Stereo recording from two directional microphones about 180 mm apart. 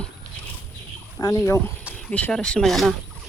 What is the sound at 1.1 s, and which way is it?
Speech, 20° left (ahead or behind).